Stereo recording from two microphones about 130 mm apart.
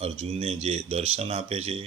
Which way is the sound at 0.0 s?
50° right (ahead or behind).